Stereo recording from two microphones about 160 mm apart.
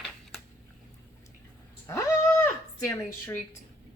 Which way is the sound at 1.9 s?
15° left (ahead or behind).